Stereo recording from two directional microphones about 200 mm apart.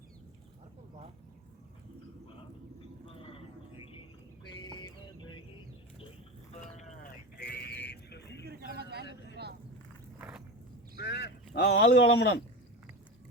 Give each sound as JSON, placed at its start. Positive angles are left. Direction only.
{"t": 3.1, "sound": "a sound", "side_deg": 25}
{"t": 4.4, "sound": "music", "side_deg": 20}
{"t": 6.5, "sound": "sheep", "side_deg": 35}
{"t": 7.3, "sound": "sheep", "side_deg": 50}
{"t": 8.4, "sound": "a sound", "side_deg": -50}
{"t": 9.0, "sound": "vehicle", "side_deg": 60}
{"t": 10.2, "sound": "walk", "side_deg": -10}
{"t": 10.9, "sound": "a sound", "side_deg": 55}
{"t": 11.5, "sound": "speech", "side_deg": 60}